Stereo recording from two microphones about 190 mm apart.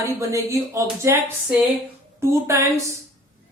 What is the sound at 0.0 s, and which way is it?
Speech, 15° right (ahead or behind).